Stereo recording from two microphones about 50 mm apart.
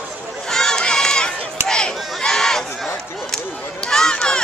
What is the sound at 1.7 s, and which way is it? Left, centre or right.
Crowd, centre.